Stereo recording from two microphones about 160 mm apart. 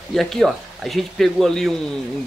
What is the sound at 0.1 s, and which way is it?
Speech, centre (ahead or behind).